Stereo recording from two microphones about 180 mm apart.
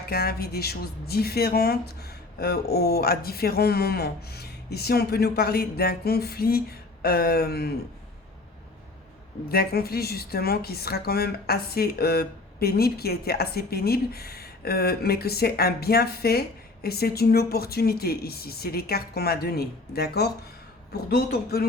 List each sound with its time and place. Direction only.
0.1 s a woman's voice: 60° left (ahead or behind)
9.5 s a woman's voice: 60° left (ahead or behind)